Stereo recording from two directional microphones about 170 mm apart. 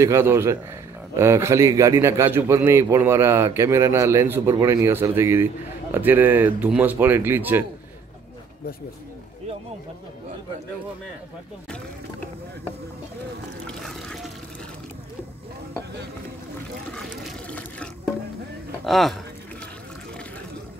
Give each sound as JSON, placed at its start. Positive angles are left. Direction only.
{"t": 0.0, "sound": "a man's voice", "side_deg": -15}
{"t": 13.7, "sound": "liquid", "side_deg": 5}
{"t": 16.9, "sound": "water", "side_deg": 5}
{"t": 18.9, "sound": "speech", "side_deg": 0}